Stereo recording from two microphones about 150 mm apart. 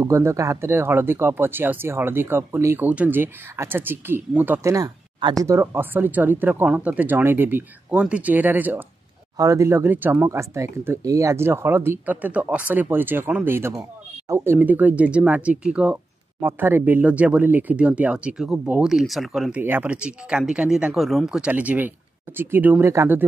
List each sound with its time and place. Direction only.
0.0 s speech: 20° right (ahead or behind)